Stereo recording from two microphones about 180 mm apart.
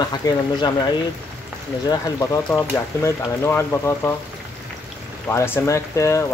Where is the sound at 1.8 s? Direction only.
20° left (ahead or behind).